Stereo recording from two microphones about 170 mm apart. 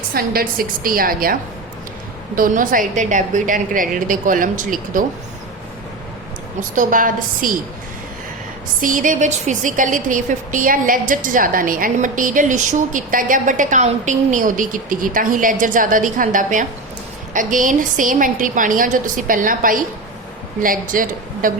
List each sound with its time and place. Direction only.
0.1 s a woman's voice: 60° right (ahead or behind)
6.6 s a woman's voice: 50° right (ahead or behind)
8.8 s a woman's voice: 50° right (ahead or behind)